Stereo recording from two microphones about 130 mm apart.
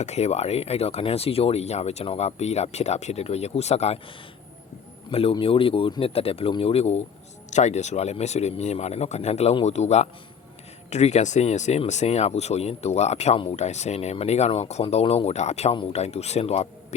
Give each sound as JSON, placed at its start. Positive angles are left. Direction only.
{"t": 0.0, "sound": "speech", "side_deg": 55}
{"t": 5.3, "sound": "speech", "side_deg": 45}
{"t": 7.5, "sound": "speech", "side_deg": 60}